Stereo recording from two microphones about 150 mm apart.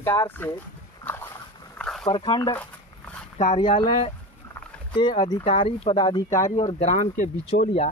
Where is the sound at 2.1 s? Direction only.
30° left (ahead or behind).